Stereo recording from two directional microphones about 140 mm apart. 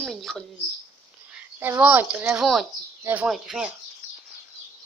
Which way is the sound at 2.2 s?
5° right (ahead or behind).